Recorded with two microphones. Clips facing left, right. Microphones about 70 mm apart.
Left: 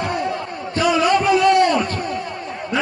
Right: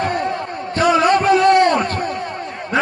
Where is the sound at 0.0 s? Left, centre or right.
Right.